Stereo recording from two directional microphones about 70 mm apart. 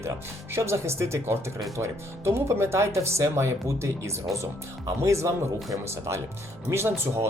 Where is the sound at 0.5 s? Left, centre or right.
Right.